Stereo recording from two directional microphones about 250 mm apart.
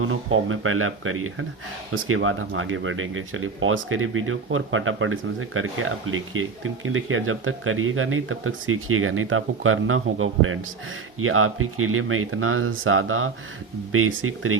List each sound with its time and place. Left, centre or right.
0.0 s speech: right